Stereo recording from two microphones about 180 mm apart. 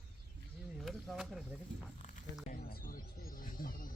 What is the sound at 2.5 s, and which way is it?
Speech, 55° left (ahead or behind).